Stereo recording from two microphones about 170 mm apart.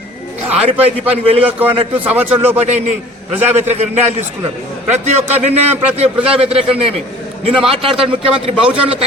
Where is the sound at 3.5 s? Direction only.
40° right (ahead or behind).